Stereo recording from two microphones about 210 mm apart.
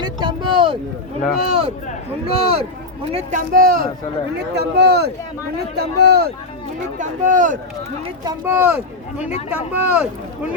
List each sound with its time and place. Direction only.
0.0 s a sound: 20° right (ahead or behind)
1.5 s speech: 30° right (ahead or behind)
3.5 s speech: 40° right (ahead or behind)
7.0 s speech: 35° right (ahead or behind)
8.0 s speech: 15° right (ahead or behind)